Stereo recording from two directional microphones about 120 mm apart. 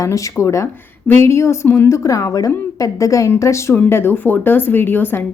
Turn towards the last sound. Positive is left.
turn(degrees=15)  # may be behind; listen again after turning